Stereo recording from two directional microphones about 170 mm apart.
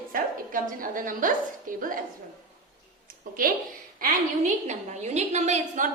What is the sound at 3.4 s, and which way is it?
A woman's voice, 55° right (ahead or behind).